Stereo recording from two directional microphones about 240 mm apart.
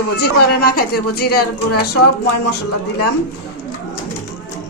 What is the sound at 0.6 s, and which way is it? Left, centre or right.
Speech, left.